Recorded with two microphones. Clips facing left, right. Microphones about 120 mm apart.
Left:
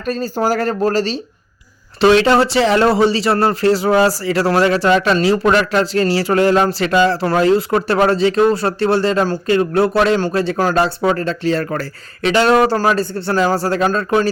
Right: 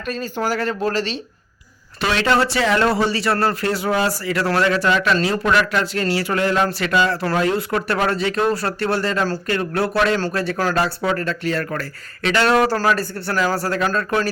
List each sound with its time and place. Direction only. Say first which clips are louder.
0.0 s speech: left 5 dB; 35° left (ahead or behind)